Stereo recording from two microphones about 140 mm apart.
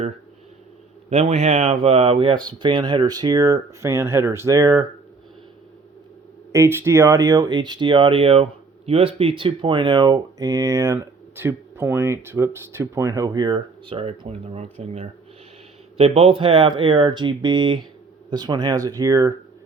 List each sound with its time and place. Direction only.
1.1 s speech: 50° right (ahead or behind); by 4.9 s 30° right (ahead or behind)
6.5 s speech: 20° right (ahead or behind)